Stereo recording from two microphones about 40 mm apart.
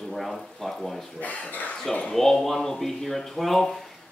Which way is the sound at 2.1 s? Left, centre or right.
Centre.